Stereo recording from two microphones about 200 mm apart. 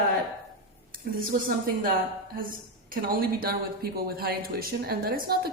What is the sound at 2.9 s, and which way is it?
Speech, 45° right (ahead or behind).